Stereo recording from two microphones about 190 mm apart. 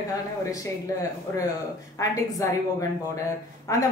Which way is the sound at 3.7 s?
15° left (ahead or behind).